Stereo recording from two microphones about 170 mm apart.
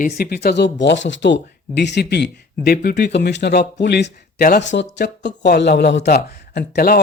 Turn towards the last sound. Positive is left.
turn(degrees=65)  # may be behind; listen again after turning